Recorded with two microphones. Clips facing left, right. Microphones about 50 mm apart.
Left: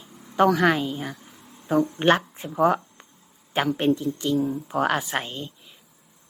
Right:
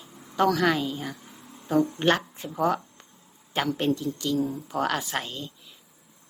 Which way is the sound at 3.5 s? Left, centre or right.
Centre.